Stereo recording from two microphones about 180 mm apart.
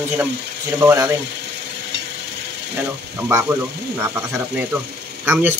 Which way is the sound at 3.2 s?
15° right (ahead or behind).